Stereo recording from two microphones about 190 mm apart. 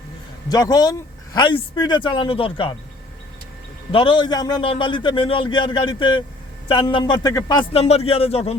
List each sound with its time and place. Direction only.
0.4 s speech: 20° left (ahead or behind)
3.9 s speech: 25° left (ahead or behind)